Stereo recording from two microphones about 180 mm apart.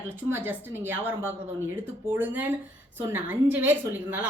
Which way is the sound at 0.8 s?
10° right (ahead or behind).